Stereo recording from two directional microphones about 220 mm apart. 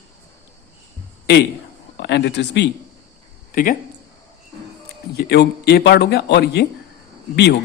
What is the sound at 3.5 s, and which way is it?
Speech, 40° left (ahead or behind).